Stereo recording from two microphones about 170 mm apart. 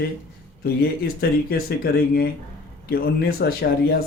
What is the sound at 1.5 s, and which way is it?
Speech, 65° left (ahead or behind).